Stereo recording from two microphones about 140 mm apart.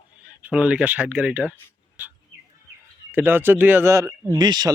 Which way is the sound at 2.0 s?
10° right (ahead or behind).